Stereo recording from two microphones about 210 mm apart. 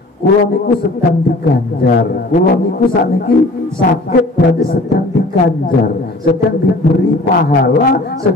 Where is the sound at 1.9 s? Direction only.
45° left (ahead or behind).